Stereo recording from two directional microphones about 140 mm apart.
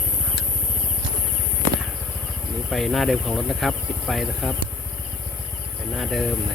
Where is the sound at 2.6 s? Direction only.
Centre (ahead or behind).